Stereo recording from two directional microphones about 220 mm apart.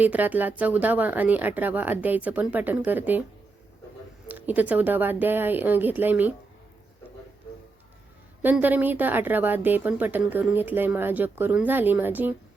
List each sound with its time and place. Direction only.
0.0 s speech: 5° right (ahead or behind)
4.3 s speech: 5° right (ahead or behind)
8.4 s speech: 5° right (ahead or behind)